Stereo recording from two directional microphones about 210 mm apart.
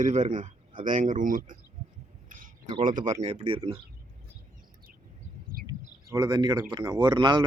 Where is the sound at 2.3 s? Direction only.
40° right (ahead or behind).